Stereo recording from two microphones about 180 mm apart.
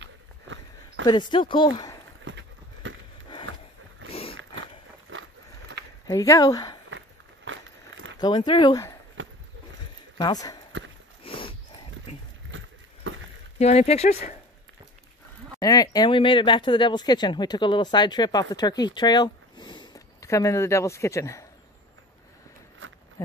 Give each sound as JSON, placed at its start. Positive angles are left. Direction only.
{"t": 0.0, "sound": "walk", "side_deg": -90}
{"t": 1.0, "sound": "speech", "side_deg": 25}
{"t": 2.2, "sound": "a sound", "side_deg": -90}
{"t": 4.1, "sound": "a sound", "side_deg": 30}
{"t": 6.0, "sound": "speech", "side_deg": 20}
{"t": 7.4, "sound": "a sound", "side_deg": -90}
{"t": 8.2, "sound": "speech", "side_deg": 25}
{"t": 10.1, "sound": "speech", "side_deg": 20}
{"t": 11.2, "sound": "a sound", "side_deg": 30}
{"t": 12.4, "sound": "vehicle", "side_deg": -90}
{"t": 13.6, "sound": "speech", "side_deg": 35}
{"t": 15.6, "sound": "speech", "side_deg": 20}
{"t": 22.8, "sound": "insect", "side_deg": -90}